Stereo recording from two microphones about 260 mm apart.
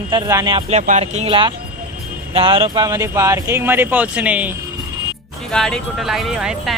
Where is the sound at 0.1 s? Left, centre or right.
Centre.